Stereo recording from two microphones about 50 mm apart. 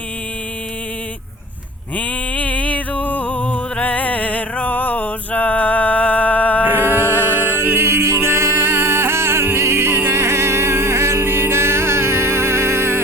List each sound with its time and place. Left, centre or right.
2.0 s music: left
6.7 s music: right